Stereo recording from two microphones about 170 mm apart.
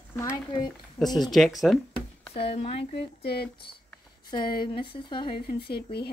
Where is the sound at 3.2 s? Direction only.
75° left (ahead or behind).